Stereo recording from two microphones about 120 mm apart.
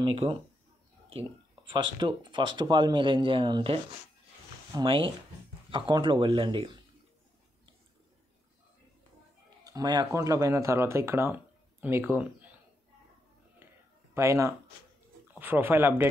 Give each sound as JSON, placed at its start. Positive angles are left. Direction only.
{"t": 0.0, "sound": "speech", "side_deg": -50}
{"t": 4.8, "sound": "speech", "side_deg": -45}
{"t": 9.7, "sound": "speech", "side_deg": -35}
{"t": 13.6, "sound": "a sound", "side_deg": -15}
{"t": 14.1, "sound": "speech", "side_deg": -25}